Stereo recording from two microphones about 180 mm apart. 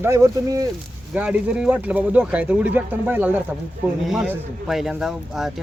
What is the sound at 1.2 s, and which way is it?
Speech, 5° right (ahead or behind).